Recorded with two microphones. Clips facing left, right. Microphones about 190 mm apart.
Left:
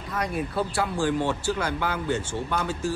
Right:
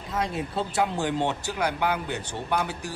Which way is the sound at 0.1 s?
25° right (ahead or behind).